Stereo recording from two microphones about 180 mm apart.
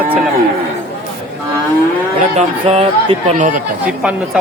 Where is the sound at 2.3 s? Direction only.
35° right (ahead or behind).